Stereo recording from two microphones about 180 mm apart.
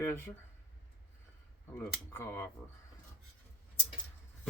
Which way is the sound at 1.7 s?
15° left (ahead or behind).